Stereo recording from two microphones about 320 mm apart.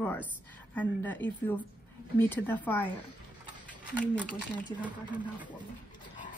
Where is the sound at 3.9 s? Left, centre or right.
Centre.